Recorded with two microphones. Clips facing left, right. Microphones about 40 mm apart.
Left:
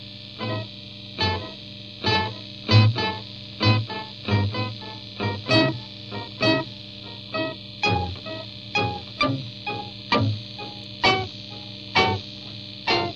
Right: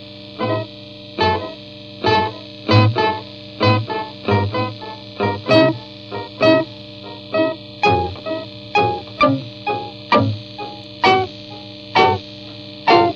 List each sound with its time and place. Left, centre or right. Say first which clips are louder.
0.4 s music: right 10 dB; right